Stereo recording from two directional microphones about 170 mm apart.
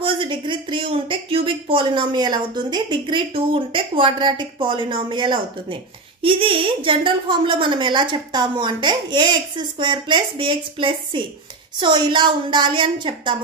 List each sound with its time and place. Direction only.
0.0 s a woman's voice: 30° right (ahead or behind)